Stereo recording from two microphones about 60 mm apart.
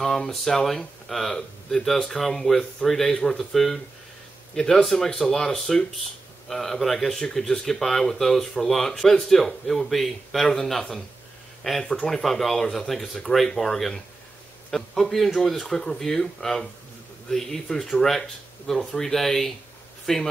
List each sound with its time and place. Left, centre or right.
0.0 s speech: centre